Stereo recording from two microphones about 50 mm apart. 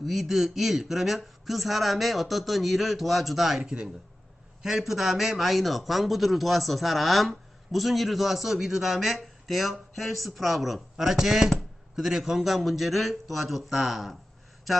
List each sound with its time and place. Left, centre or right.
0.0 s a man's voice: centre
3.6 s speech: centre
4.6 s a man's voice: centre